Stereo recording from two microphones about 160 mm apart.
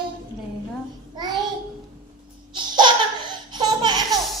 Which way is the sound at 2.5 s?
30° right (ahead or behind).